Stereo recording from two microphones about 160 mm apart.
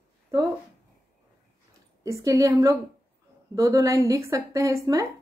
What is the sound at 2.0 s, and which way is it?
A woman's voice, 20° right (ahead or behind).